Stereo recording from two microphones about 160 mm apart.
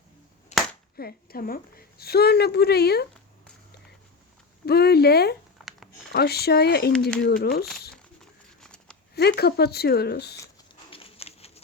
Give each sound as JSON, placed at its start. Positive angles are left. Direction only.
{"t": 0.5, "sound": "finger snapping", "side_deg": 45}
{"t": 0.9, "sound": "a woman's voice", "side_deg": 70}
{"t": 4.6, "sound": "a woman's voice", "side_deg": 80}
{"t": 7.2, "sound": "speech", "side_deg": 75}
{"t": 8.2, "sound": "a sound", "side_deg": 5}
{"t": 9.1, "sound": "speech", "side_deg": 90}
{"t": 10.9, "sound": "a sound", "side_deg": 35}